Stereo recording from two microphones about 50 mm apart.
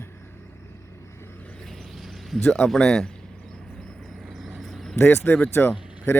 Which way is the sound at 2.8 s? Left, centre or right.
Centre.